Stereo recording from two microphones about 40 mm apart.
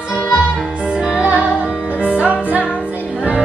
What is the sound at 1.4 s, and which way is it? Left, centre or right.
Music, right.